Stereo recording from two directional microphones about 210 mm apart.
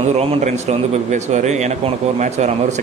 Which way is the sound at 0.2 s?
30° right (ahead or behind).